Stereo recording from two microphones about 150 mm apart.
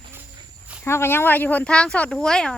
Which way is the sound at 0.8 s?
15° left (ahead or behind).